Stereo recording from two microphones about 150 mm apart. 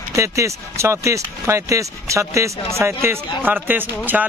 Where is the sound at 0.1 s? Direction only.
20° right (ahead or behind).